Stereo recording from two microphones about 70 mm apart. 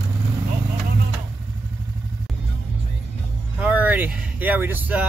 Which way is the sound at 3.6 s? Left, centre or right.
Right.